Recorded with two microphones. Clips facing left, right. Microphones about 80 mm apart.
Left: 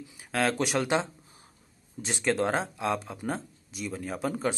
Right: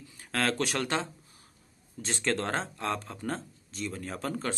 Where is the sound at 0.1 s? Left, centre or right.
Centre.